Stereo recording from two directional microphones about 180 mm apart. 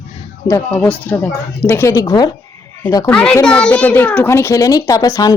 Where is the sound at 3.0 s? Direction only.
5° left (ahead or behind).